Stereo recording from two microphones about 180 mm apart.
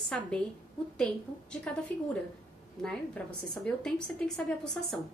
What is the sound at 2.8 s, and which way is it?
A woman's voice, 5° left (ahead or behind).